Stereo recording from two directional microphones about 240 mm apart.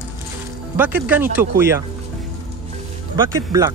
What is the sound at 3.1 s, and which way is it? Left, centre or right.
Speech, centre.